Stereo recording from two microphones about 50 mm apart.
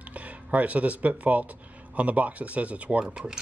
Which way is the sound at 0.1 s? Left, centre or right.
Right.